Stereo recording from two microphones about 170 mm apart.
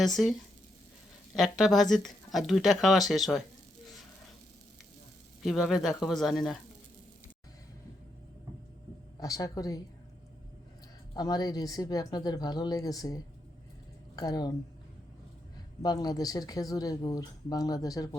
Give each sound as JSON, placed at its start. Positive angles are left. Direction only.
{"t": 0.0, "sound": "speech", "side_deg": 0}
{"t": 1.4, "sound": "speech", "side_deg": 0}
{"t": 5.4, "sound": "speech", "side_deg": 0}
{"t": 9.2, "sound": "speech", "side_deg": 20}
{"t": 11.1, "sound": "speech", "side_deg": 25}
{"t": 15.8, "sound": "speech", "side_deg": 20}